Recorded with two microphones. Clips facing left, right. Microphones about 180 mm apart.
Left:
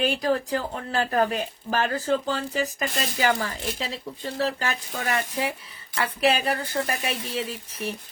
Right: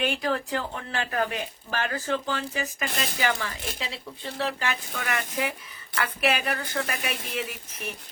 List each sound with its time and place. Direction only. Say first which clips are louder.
0.0 s speech: left 3 dB; 35° left (ahead or behind)